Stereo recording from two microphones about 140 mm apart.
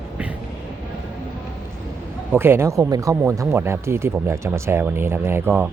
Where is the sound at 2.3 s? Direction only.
15° right (ahead or behind).